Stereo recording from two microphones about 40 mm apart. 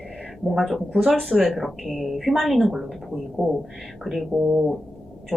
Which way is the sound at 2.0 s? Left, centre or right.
Centre.